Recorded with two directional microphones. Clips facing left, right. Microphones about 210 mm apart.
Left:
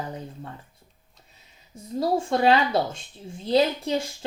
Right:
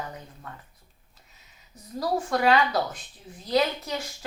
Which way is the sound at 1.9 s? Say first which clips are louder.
Left 3 dB; 25° left (ahead or behind).